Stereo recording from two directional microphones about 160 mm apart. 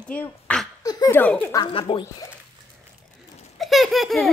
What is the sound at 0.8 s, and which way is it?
Laughter, 20° left (ahead or behind).